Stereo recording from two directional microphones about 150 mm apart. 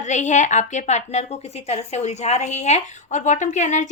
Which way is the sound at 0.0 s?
55° left (ahead or behind).